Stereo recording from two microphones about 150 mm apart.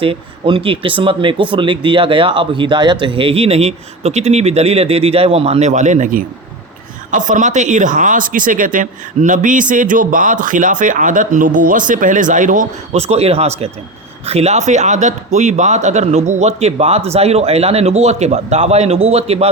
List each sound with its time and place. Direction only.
0.0 s speech: 35° right (ahead or behind)